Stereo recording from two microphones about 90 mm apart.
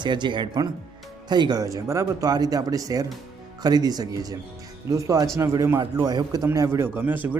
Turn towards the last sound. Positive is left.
turn(degrees=-20)  # may be behind; listen again after turning